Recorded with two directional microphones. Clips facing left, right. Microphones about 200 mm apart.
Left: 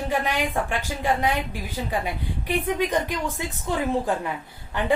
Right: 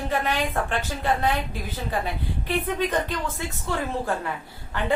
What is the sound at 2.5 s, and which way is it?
A woman's voice, 15° left (ahead or behind).